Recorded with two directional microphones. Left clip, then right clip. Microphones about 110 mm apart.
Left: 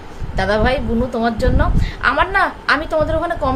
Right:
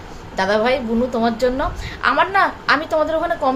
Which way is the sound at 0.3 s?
5° left (ahead or behind).